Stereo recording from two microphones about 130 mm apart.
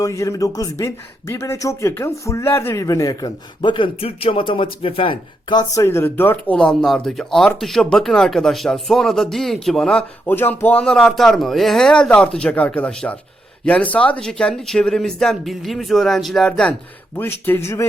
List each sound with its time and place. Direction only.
0.0 s speech: 25° left (ahead or behind)